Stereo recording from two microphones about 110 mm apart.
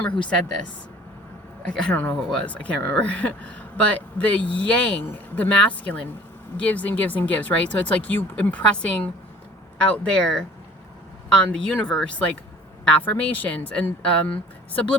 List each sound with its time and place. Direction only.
0.1 s a woman's voice: 45° left (ahead or behind)
1.7 s speech: 15° left (ahead or behind)